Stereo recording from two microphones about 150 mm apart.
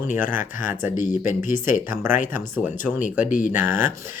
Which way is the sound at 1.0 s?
60° left (ahead or behind).